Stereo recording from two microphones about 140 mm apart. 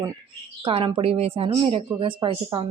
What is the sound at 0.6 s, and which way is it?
Speech, 40° right (ahead or behind).